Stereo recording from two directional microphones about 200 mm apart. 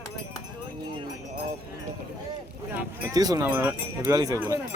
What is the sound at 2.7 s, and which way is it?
Speech, 15° right (ahead or behind).